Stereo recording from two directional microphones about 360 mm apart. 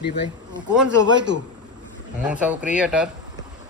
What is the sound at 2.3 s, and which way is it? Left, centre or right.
Speech, centre.